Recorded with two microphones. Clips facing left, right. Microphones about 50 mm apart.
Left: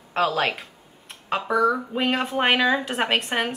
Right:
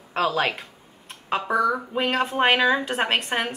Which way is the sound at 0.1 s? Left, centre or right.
Centre.